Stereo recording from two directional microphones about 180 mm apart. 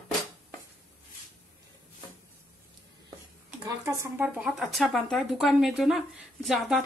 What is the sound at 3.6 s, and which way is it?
Speech, 15° right (ahead or behind).